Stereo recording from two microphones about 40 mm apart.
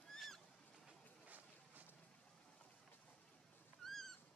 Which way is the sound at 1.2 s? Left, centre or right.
Right.